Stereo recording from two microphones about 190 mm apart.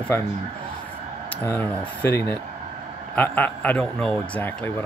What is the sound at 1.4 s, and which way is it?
Speech, 10° left (ahead or behind).